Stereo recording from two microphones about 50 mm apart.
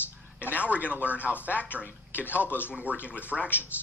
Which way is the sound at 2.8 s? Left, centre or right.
Centre.